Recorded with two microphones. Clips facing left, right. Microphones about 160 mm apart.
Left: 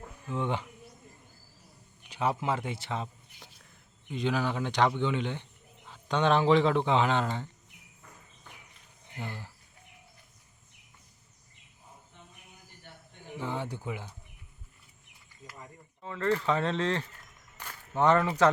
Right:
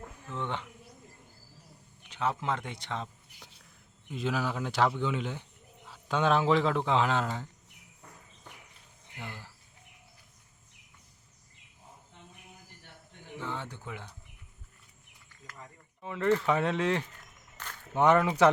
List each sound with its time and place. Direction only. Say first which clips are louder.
0.3 s speech: left 4 dB; 10° left (ahead or behind)
2.0 s speech: left 2 dB; 10° left (ahead or behind)
9.1 s speech: left 4 dB; 25° left (ahead or behind)
13.4 s speech: left 4 dB; 15° left (ahead or behind)
16.0 s speech: right 2 dB; 15° right (ahead or behind)
17.6 s walk: even; 10° left (ahead or behind)
17.9 s speech: right 1 dB; 15° right (ahead or behind)